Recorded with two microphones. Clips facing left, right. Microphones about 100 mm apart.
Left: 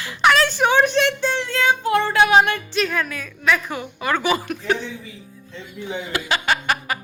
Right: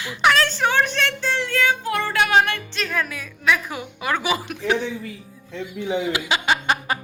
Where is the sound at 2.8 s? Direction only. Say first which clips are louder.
Left 4 dB; centre (ahead or behind).